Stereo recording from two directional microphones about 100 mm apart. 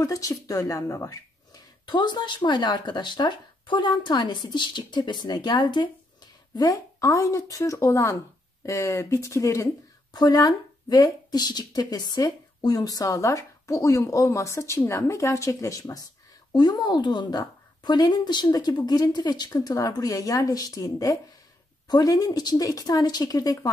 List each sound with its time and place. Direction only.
0.0 s a woman's voice: 35° left (ahead or behind)
1.9 s speech: 45° left (ahead or behind); by 9.7 s 30° left (ahead or behind)
10.1 s speech: 40° left (ahead or behind)